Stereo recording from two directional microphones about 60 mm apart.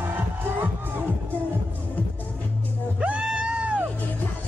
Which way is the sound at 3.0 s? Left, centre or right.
Centre.